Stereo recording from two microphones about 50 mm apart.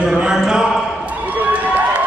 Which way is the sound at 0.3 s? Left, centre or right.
Centre.